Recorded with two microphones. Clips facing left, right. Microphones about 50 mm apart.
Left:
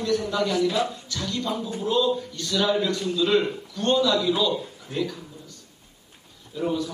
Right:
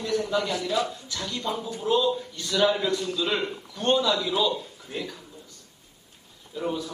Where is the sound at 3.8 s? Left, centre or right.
Centre.